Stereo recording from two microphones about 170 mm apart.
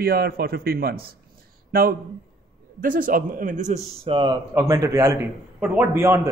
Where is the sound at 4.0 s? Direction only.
30° right (ahead or behind).